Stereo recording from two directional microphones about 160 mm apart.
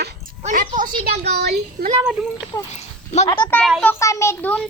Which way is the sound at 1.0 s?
80° right.